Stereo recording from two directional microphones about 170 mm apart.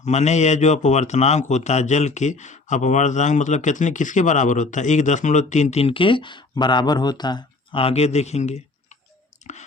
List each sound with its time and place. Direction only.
0.0 s a man's voice: 40° left (ahead or behind)